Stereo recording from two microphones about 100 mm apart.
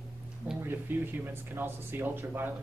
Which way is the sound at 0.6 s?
20° right (ahead or behind).